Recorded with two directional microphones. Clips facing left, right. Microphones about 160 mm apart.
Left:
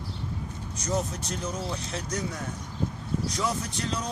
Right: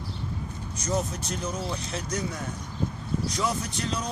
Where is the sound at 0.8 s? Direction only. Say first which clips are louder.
Right 1 dB; 5° right (ahead or behind).